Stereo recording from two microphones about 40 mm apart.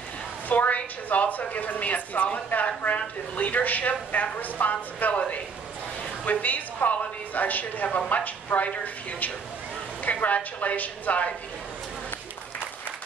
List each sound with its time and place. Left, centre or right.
0.5 s a woman's voice: left
6.4 s a woman's voice: left